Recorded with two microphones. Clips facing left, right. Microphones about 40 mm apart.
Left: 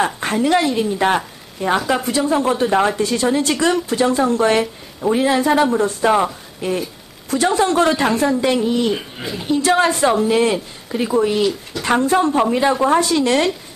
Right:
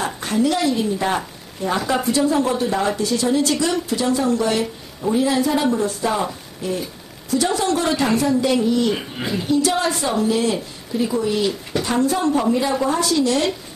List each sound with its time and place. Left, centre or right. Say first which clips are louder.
0.2 s a woman's voice: right 1 dB; left